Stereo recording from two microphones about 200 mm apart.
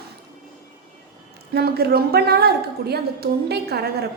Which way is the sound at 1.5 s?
50° right (ahead or behind).